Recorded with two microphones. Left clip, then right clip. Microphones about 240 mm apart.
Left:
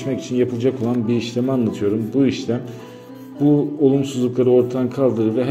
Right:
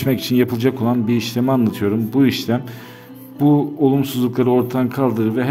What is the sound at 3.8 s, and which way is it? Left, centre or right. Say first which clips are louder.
A man's voice: even; right.